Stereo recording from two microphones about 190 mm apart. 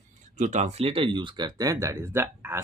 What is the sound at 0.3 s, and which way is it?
Speech, 40° right (ahead or behind).